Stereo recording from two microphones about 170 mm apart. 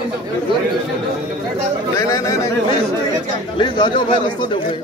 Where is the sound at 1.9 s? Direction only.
20° left (ahead or behind).